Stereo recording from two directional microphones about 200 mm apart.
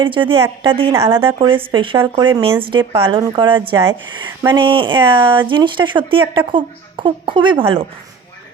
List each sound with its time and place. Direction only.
0.0 s speech: 25° right (ahead or behind)
0.9 s speech: 15° right (ahead or behind)
1.2 s speech: 25° right (ahead or behind)